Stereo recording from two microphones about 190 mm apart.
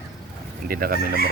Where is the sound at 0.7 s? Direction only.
50° right (ahead or behind).